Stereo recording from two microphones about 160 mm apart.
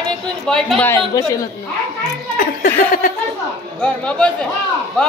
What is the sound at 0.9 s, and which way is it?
Speech, 20° left (ahead or behind).